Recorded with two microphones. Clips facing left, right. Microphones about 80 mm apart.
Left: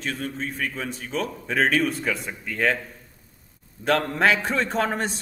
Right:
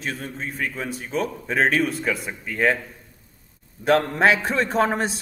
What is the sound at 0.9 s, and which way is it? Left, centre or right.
A man's voice, centre.